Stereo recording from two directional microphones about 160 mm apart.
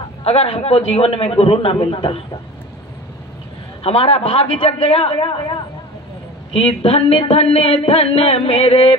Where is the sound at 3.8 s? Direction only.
40° left (ahead or behind).